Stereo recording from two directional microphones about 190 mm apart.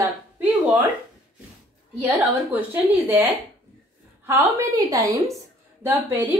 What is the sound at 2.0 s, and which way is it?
A woman's voice, 10° right (ahead or behind).